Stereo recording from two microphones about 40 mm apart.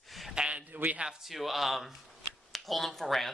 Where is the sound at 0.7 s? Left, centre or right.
Right.